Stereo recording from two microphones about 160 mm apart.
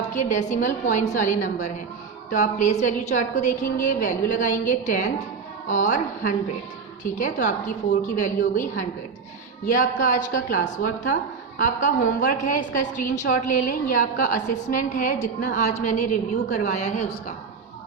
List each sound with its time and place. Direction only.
0.1 s a woman's voice: 50° left (ahead or behind)